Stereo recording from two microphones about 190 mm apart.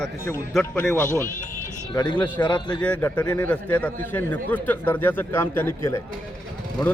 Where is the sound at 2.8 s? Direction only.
10° left (ahead or behind).